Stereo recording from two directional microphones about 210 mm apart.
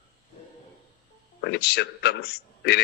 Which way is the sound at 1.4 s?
50° left (ahead or behind).